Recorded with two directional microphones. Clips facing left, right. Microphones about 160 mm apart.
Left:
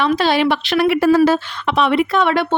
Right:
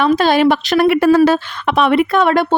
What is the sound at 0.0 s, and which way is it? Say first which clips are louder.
Speech: right 4 dB; 45° right (ahead or behind).